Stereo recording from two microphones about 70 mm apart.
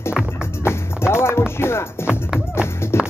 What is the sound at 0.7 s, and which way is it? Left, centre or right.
Music, left.